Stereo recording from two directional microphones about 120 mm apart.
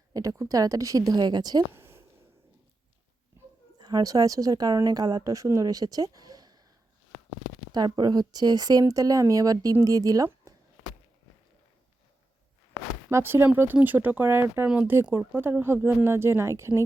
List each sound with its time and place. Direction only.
0.1 s speech: 30° right (ahead or behind)
1.7 s a sound: 20° right (ahead or behind)
3.8 s a woman's voice: 35° right (ahead or behind)
7.7 s a woman's voice: 35° right (ahead or behind)
13.1 s speech: 20° right (ahead or behind)